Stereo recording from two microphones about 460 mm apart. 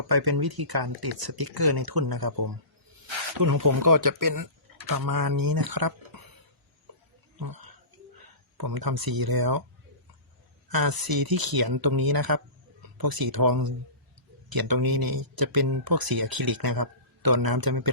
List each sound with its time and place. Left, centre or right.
0.1 s speech: right
7.3 s speech: right
10.7 s speech: right